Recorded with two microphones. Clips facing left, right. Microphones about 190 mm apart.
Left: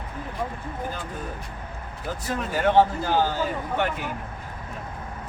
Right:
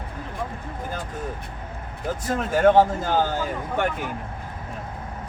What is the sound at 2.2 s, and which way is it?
Speech, 45° right (ahead or behind).